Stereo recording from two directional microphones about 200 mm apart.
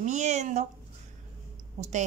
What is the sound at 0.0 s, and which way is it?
Speech, 35° right (ahead or behind).